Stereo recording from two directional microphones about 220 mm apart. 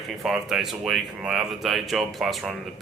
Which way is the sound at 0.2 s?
Centre (ahead or behind).